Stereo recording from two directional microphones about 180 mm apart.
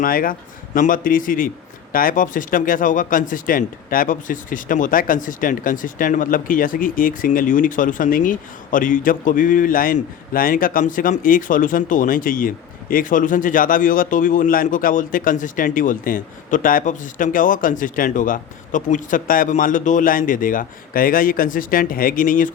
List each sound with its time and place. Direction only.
0.0 s speech: 50° left (ahead or behind)